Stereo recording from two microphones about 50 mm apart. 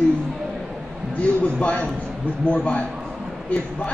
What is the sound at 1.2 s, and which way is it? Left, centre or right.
A man's voice, left.